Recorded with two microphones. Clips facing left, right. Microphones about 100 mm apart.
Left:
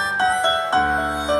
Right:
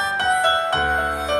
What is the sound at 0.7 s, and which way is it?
Music, 25° left (ahead or behind).